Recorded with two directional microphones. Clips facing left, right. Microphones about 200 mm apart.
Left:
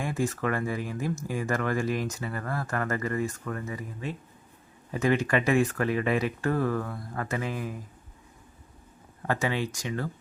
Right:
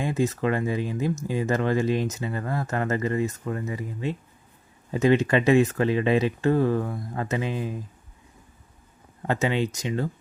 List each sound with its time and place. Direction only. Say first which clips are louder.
0.0 s speech: right 4 dB; 20° right (ahead or behind)
9.2 s speech: right 4 dB; 20° right (ahead or behind)